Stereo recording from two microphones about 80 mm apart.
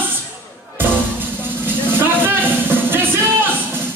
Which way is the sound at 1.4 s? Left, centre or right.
Right.